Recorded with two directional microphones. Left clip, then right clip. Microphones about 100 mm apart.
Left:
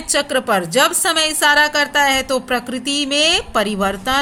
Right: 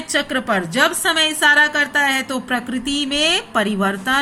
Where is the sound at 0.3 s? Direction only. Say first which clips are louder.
Left 3 dB; 65° left (ahead or behind).